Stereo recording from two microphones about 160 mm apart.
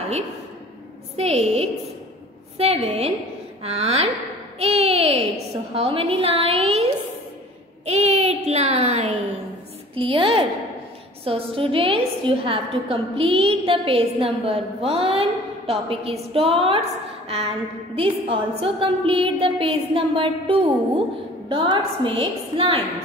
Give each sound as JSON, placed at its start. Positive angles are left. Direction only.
{"t": 1.1, "sound": "a woman's voice", "side_deg": -40}
{"t": 7.8, "sound": "a child's voice", "side_deg": -40}
{"t": 9.9, "sound": "a woman's voice", "side_deg": -35}